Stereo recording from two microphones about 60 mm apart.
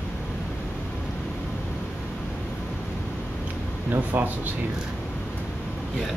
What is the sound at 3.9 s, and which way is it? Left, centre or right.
Speech, right.